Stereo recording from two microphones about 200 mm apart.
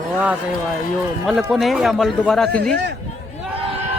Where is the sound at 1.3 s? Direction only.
Centre (ahead or behind).